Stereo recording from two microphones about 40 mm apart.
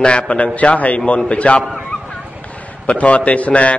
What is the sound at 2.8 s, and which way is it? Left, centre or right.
Speech, left.